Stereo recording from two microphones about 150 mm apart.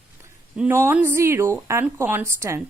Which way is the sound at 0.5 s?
10° right (ahead or behind).